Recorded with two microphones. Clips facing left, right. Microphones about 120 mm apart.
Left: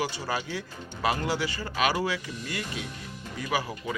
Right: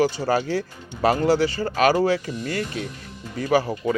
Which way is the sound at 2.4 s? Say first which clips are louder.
Right 8 dB; 45° right (ahead or behind).